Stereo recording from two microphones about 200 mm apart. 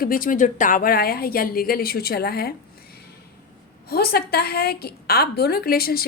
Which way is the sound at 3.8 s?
50° left (ahead or behind).